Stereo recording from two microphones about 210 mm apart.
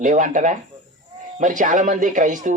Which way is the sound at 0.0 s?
35° right (ahead or behind).